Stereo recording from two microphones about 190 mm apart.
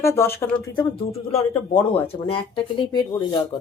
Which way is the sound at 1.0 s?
30° left (ahead or behind).